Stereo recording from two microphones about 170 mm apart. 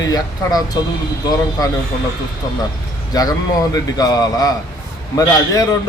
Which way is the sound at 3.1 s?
20° left (ahead or behind).